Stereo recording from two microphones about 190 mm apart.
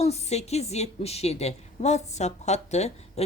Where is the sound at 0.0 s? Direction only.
35° left (ahead or behind).